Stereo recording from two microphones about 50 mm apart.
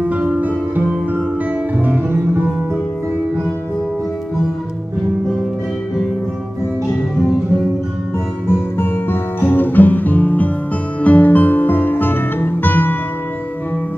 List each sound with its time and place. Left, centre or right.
0.0 s music: right
1.9 s music: right
8.5 s guitar: left
11.0 s music: left